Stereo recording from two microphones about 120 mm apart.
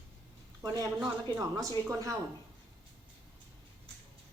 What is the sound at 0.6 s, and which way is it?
Speech, 30° right (ahead or behind).